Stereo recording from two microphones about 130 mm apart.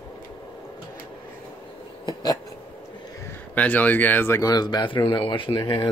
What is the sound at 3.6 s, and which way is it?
Speech, 10° left (ahead or behind).